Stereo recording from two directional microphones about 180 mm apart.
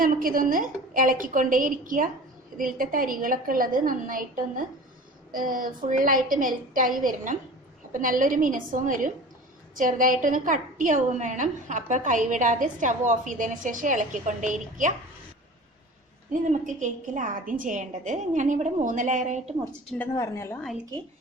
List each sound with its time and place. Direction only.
0.0 s a woman's voice: 50° right (ahead or behind)
16.3 s a woman's voice: 45° right (ahead or behind)
20.1 s a woman's voice: 15° left (ahead or behind)